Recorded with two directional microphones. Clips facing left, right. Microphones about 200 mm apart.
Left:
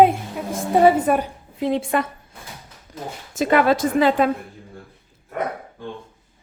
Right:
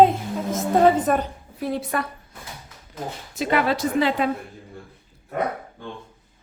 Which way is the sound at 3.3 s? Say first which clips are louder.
Left 5 dB; 50° left (ahead or behind).